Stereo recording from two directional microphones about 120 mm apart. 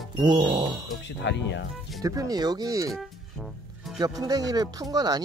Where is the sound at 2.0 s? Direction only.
30° right (ahead or behind).